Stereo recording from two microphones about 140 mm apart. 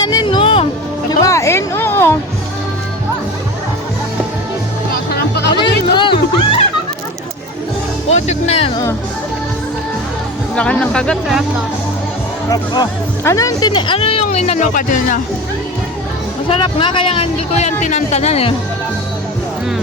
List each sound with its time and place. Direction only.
0.0 s speech: 25° left (ahead or behind)
1.2 s speech: 20° left (ahead or behind)
5.6 s speech: 35° left (ahead or behind)
8.1 s speech: 50° left (ahead or behind)
10.5 s speech: 10° left (ahead or behind)
12.5 s speech: 30° left (ahead or behind); by 14.7 s 50° left (ahead or behind)
14.7 s speech: 70° left (ahead or behind)
16.5 s speech: 40° left (ahead or behind)